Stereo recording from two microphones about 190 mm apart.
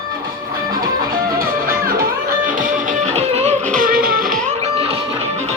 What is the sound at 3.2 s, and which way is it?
Music, 35° right (ahead or behind).